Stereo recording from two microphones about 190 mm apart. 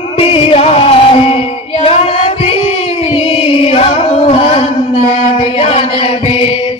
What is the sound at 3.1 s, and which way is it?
Chant, 30° left (ahead or behind).